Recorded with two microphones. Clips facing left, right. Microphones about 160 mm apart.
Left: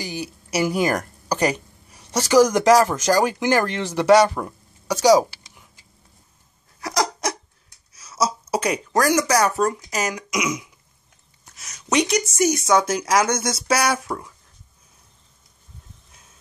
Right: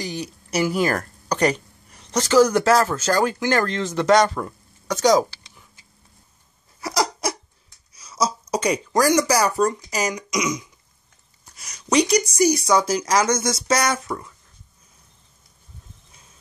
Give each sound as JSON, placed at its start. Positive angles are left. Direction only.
{"t": 0.0, "sound": "speech", "side_deg": 10}
{"t": 6.8, "sound": "a sound", "side_deg": 0}
{"t": 9.1, "sound": "speech", "side_deg": 0}